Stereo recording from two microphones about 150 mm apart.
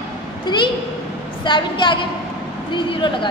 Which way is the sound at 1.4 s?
30° left (ahead or behind).